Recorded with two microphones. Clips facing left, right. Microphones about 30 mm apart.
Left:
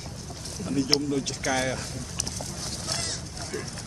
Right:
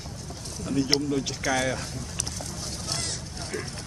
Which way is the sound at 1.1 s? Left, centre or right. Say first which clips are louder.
Right 1 dB; centre.